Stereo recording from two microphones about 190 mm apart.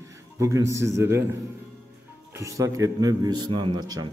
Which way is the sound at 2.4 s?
15° right (ahead or behind).